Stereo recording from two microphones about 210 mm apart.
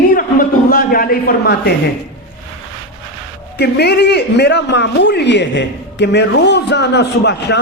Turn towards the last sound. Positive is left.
turn(degrees=55)  # may be behind; listen again after turning